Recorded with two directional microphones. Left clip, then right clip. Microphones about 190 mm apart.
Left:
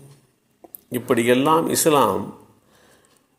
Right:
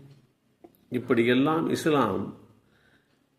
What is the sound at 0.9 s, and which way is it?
A man's voice, 25° left (ahead or behind).